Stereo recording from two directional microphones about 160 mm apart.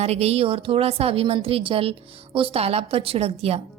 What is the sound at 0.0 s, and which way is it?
A woman's voice, 40° right (ahead or behind).